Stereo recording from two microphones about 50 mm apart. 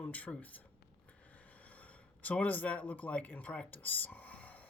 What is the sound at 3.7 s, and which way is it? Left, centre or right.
Whispering, left.